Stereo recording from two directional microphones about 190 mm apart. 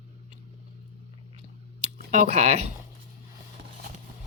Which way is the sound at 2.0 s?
40° right (ahead or behind).